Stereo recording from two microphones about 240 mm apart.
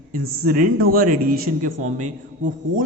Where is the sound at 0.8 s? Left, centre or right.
Right.